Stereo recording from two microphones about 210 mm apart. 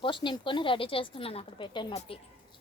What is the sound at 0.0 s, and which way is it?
A woman's voice, 25° left (ahead or behind).